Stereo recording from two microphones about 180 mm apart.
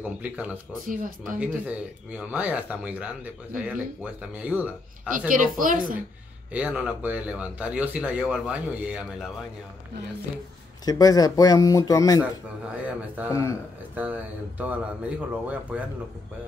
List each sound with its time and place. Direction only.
0.0 s speech: 10° right (ahead or behind)
0.8 s speech: 50° right (ahead or behind)
1.4 s speech: 5° right (ahead or behind)
5.3 s speech: 50° right (ahead or behind)
6.5 s speech: 5° right (ahead or behind)
10.9 s speech: 20° left (ahead or behind)
12.8 s speech: 10° right (ahead or behind)
13.3 s a man's voice: 15° left (ahead or behind)
13.9 s speech: 10° right (ahead or behind)